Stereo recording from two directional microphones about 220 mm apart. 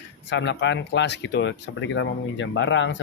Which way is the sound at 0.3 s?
55° left (ahead or behind).